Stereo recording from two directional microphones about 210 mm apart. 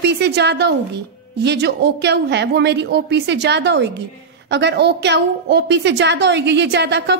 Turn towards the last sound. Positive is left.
turn(degrees=-55)  # may be behind; listen again after turning